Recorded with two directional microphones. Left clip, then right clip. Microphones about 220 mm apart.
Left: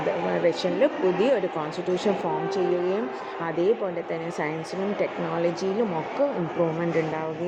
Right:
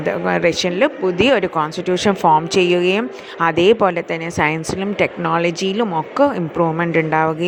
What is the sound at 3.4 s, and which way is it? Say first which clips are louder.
Speech: right 12 dB; 45° right (ahead or behind).